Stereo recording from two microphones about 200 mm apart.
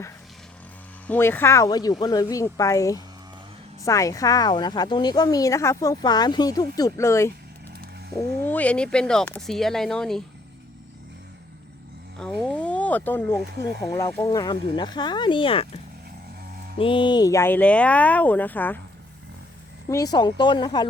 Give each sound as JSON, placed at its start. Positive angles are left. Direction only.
{"t": 1.0, "sound": "a woman's voice", "side_deg": 10}
{"t": 8.4, "sound": "speech", "side_deg": 10}
{"t": 12.2, "sound": "a woman's voice", "side_deg": 0}
{"t": 19.9, "sound": "speech", "side_deg": 15}